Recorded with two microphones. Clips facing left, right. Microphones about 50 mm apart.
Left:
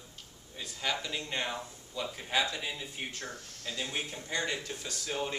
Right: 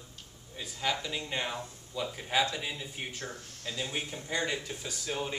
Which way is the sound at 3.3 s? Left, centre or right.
Right.